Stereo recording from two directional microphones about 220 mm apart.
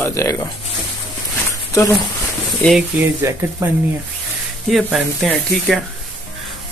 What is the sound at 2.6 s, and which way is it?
A man's voice, centre (ahead or behind).